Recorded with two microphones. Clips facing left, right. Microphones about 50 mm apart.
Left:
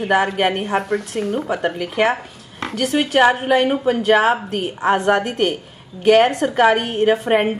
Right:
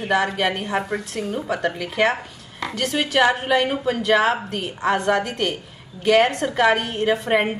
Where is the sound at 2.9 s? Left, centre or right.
Left.